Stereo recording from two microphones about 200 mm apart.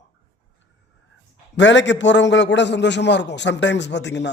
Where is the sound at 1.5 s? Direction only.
65° left (ahead or behind).